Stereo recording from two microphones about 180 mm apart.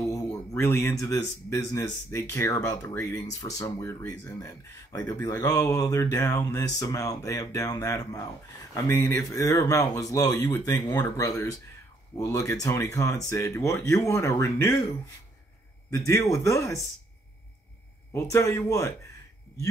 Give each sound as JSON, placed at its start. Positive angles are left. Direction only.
{"t": 0.0, "sound": "speech", "side_deg": 20}
{"t": 15.9, "sound": "speech", "side_deg": 15}
{"t": 18.1, "sound": "speech", "side_deg": 15}